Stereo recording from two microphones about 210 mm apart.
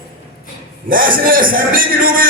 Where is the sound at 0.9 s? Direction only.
40° right (ahead or behind).